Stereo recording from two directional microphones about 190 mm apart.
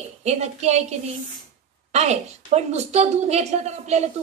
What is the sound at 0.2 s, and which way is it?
A woman's voice, 35° right (ahead or behind).